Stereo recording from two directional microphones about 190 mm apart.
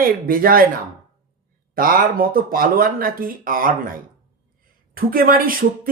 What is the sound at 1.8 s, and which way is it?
Speech, 50° right (ahead or behind).